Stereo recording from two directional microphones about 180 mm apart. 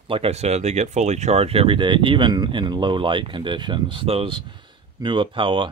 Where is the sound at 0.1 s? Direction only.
35° right (ahead or behind).